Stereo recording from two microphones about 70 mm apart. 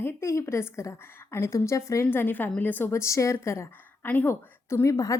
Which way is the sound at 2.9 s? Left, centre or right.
Left.